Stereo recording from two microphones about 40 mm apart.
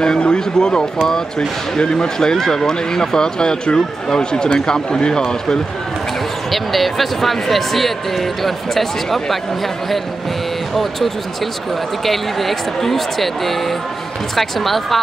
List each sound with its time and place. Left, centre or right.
0.0 s speech: left
6.5 s speech: centre
12.1 s speech: centre
14.3 s speech: centre